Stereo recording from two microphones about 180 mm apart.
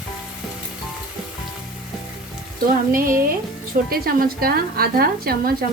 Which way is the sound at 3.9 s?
55° right (ahead or behind).